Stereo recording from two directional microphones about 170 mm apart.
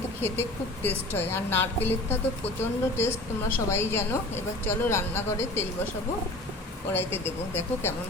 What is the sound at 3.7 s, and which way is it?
A woman's voice, 15° left (ahead or behind).